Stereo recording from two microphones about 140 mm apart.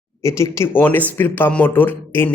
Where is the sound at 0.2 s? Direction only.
20° left (ahead or behind).